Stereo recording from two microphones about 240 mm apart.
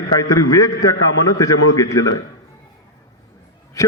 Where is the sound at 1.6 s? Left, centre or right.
Left.